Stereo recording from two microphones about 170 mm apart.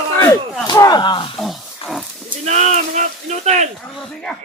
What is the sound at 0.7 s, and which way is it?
Speech, 25° left (ahead or behind).